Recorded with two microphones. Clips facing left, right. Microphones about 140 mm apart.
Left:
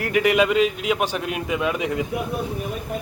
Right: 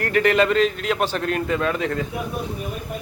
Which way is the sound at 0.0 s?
10° left (ahead or behind).